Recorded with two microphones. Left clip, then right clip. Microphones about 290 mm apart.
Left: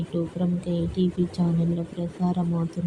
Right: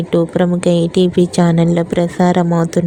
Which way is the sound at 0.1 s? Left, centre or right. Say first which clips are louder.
Right 16 dB; right.